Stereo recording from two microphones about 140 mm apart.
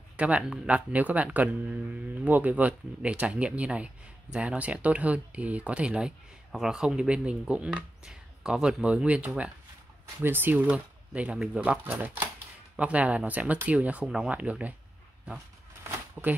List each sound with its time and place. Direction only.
0.2 s speech: 5° right (ahead or behind)
16.2 s speech: 5° right (ahead or behind)